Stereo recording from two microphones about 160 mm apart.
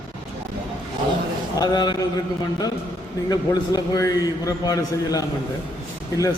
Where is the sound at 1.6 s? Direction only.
25° left (ahead or behind).